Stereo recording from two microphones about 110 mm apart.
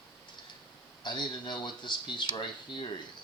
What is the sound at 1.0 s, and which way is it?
Speech, 45° left (ahead or behind).